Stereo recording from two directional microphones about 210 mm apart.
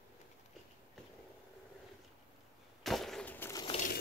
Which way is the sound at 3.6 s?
30° left (ahead or behind).